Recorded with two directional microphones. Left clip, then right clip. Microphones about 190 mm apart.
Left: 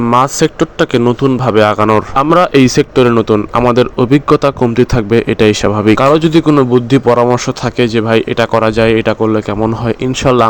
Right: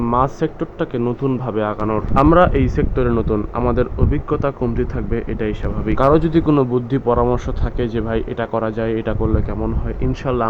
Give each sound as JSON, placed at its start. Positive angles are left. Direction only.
{"t": 0.1, "sound": "a man's voice", "side_deg": 40}
{"t": 6.0, "sound": "a man's voice", "side_deg": 35}